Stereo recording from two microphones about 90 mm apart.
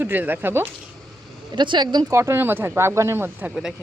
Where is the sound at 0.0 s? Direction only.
20° right (ahead or behind).